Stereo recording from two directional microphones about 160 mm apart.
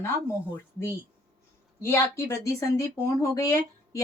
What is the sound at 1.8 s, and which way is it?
Speech, 15° left (ahead or behind).